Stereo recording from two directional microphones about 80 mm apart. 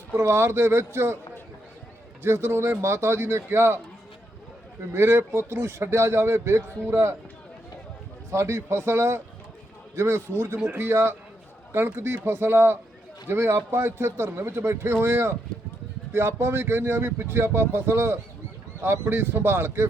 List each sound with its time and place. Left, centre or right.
0.2 s speech: right
2.2 s speech: right
4.9 s speech: right
8.3 s speech: right